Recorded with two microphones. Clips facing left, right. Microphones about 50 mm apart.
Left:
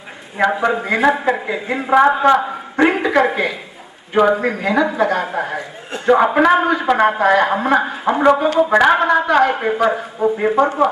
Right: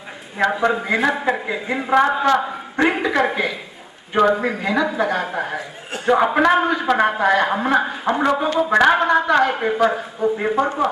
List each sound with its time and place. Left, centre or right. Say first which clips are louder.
0.4 s a man's voice: left 2 dB; centre
2.0 s a man's voice: left 5 dB; centre
2.3 s a woman's voice: left 3 dB; centre